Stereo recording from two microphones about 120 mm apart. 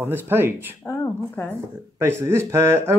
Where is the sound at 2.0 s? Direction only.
20° right (ahead or behind).